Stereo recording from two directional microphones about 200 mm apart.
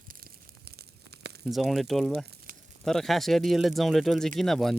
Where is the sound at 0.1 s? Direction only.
50° right (ahead or behind).